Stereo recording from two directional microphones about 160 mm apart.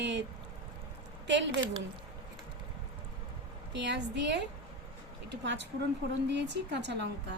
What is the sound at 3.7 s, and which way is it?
Speech, 90° right.